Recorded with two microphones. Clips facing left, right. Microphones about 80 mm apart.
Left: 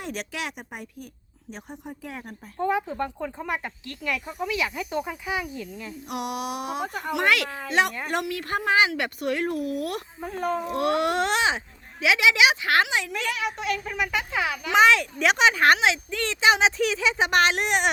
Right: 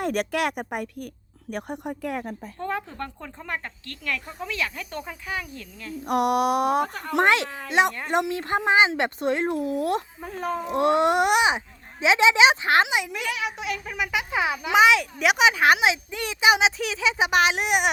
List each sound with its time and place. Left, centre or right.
0.0 s speech: right
2.6 s speech: centre
6.1 s speech: right
7.2 s speech: right
10.2 s speech: centre
10.7 s speech: right
13.3 s speech: centre
14.3 s speech: right
14.7 s speech: centre